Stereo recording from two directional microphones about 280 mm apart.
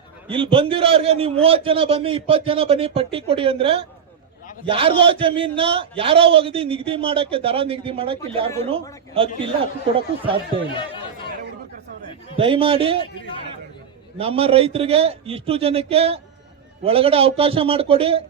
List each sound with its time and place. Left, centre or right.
0.3 s a man's voice: centre
12.4 s a man's voice: centre
14.2 s a man's voice: right